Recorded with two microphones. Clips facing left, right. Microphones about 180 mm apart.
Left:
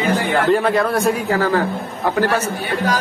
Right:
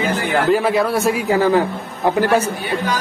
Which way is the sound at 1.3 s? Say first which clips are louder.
Right 2 dB; 15° right (ahead or behind).